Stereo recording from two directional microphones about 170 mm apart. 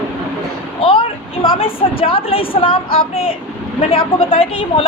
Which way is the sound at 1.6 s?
30° left (ahead or behind).